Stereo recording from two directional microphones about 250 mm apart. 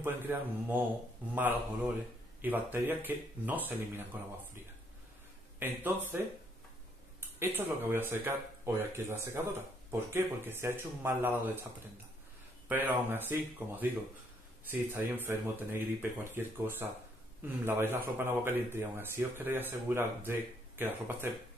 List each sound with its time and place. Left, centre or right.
0.0 s speech: centre
5.6 s speech: centre
12.6 s speech: centre